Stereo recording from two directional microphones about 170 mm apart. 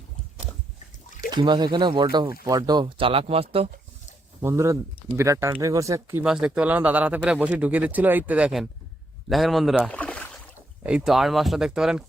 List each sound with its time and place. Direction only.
1.3 s speech: 25° right (ahead or behind)
4.4 s speech: 15° right (ahead or behind)
6.2 s speech: 5° right (ahead or behind)
9.3 s a sound: centre (ahead or behind)
10.8 s speech: 5° right (ahead or behind)